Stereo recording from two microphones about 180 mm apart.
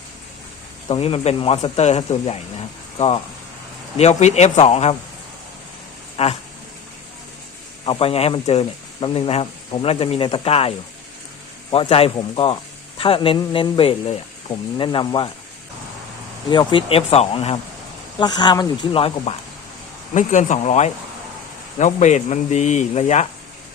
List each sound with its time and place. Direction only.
0.9 s speech: 30° left (ahead or behind)
3.9 s speech: 40° left (ahead or behind)
6.2 s speech: 35° left (ahead or behind)
7.9 s speech: 30° left (ahead or behind)
11.7 s a man's voice: 30° left (ahead or behind)
16.5 s a man's voice: 25° left (ahead or behind)
20.1 s speech: 45° left (ahead or behind)